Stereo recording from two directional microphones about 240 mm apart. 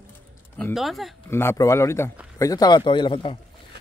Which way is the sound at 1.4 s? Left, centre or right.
Centre.